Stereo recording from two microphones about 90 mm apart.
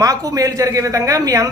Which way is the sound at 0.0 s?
40° right (ahead or behind).